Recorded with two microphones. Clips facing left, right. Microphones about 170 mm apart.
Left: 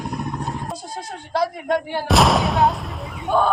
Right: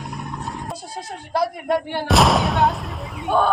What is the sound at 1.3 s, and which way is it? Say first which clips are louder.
Speech: even; 5° right (ahead or behind).